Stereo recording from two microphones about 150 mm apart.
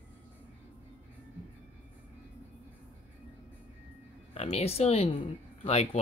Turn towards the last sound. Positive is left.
turn(degrees=40)  # may be behind; listen again after turning